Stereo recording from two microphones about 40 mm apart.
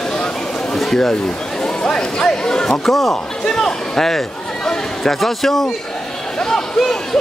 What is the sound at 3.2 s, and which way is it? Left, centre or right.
A man's voice, centre.